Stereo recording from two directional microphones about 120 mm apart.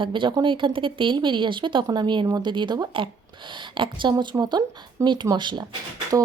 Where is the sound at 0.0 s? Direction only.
45° right (ahead or behind).